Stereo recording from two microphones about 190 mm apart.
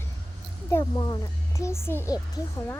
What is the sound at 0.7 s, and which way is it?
Speech, 20° left (ahead or behind).